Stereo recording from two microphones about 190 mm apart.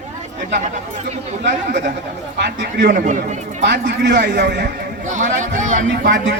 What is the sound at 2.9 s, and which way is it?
Speech, 40° right (ahead or behind).